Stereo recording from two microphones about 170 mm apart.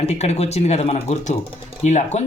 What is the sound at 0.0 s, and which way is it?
A man's voice, 40° left (ahead or behind).